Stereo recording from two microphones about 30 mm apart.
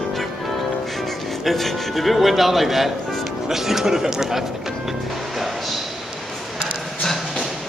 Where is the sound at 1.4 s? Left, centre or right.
Centre.